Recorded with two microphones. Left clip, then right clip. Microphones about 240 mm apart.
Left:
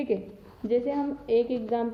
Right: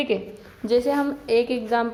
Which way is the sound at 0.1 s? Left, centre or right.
Centre.